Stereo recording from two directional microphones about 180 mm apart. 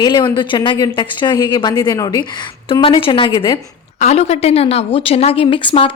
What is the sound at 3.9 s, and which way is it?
A woman's voice, 40° left (ahead or behind).